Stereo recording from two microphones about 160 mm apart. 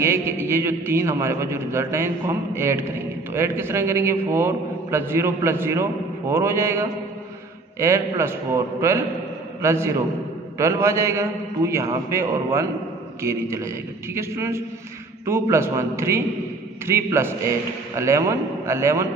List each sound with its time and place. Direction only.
0.0 s a man's voice: 15° right (ahead or behind)